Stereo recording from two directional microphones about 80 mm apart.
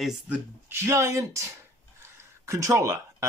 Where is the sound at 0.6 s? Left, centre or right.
Right.